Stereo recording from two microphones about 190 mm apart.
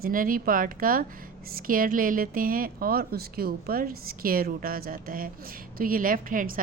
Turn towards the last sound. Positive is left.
turn(degrees=-45)  # may be behind; listen again after turning